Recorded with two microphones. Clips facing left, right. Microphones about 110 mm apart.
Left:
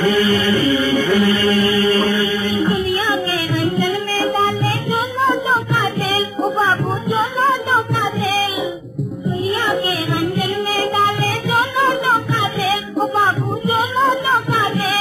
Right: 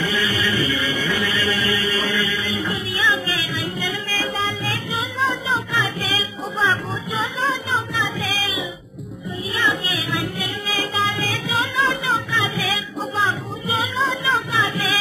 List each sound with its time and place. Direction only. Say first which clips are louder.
0.0 s music: left 8 dB; 50° left (ahead or behind)
10.3 s music: left 8 dB; 50° left (ahead or behind)